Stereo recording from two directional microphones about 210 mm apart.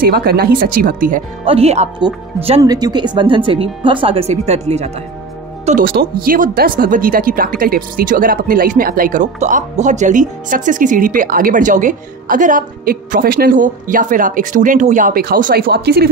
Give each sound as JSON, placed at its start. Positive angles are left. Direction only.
{"t": 0.0, "sound": "speech", "side_deg": -45}
{"t": 1.4, "sound": "speech", "side_deg": -30}
{"t": 2.6, "sound": "speech", "side_deg": -20}
{"t": 5.7, "sound": "speech", "side_deg": -40}